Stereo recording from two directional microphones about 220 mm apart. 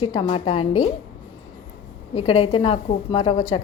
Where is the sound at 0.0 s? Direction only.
25° left (ahead or behind).